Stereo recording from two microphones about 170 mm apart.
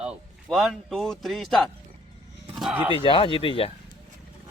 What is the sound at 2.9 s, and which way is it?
Speech, 30° left (ahead or behind).